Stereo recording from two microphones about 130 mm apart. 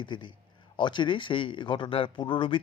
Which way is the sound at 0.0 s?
35° left (ahead or behind).